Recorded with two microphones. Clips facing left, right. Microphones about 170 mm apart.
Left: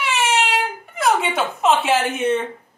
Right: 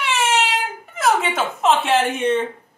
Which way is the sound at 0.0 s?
Centre (ahead or behind).